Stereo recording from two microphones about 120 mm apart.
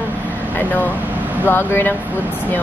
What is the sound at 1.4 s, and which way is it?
Speech, 20° left (ahead or behind).